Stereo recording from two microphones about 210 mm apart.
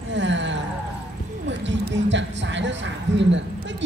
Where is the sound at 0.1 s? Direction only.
60° right (ahead or behind).